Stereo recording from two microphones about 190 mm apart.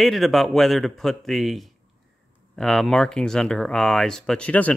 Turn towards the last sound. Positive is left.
turn(degrees=10)  # may be behind; listen again after turning